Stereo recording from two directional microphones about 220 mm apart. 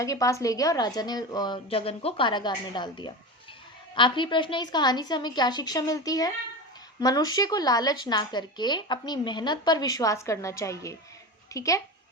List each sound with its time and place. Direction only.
0.0 s a woman's voice: 15° left (ahead or behind)